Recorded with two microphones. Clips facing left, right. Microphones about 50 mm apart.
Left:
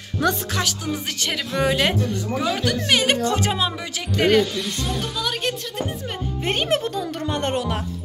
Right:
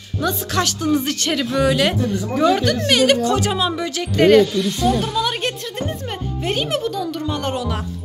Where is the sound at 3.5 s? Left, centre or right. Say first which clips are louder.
Right 4 dB; centre.